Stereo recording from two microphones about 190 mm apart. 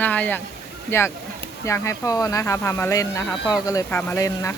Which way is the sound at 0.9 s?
15° left (ahead or behind).